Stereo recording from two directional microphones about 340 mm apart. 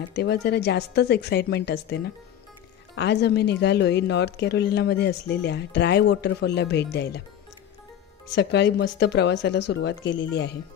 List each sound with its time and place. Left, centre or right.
0.1 s a woman's voice: left
8.4 s a woman's voice: left